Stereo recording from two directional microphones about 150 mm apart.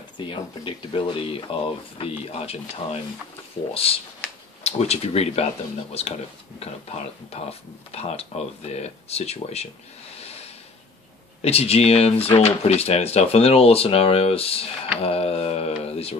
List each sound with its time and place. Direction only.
0.2 s speech: 35° left (ahead or behind)
10.1 s snort: 45° left (ahead or behind)
11.4 s speech: 45° left (ahead or behind)